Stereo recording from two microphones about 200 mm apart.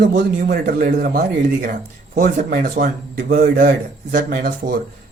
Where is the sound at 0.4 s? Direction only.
45° right (ahead or behind).